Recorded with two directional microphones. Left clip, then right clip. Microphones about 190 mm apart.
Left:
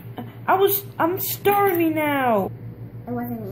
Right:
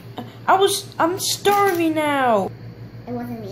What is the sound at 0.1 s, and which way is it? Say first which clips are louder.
A woman's voice: right 3 dB; 5° right (ahead or behind).